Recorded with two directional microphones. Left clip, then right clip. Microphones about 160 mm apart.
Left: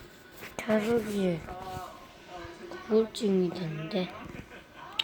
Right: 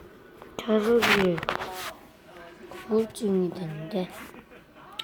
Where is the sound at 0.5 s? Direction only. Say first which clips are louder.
Right 3 dB; 20° left (ahead or behind).